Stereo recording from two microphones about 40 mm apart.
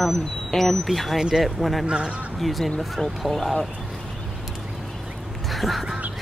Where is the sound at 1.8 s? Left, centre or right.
Right.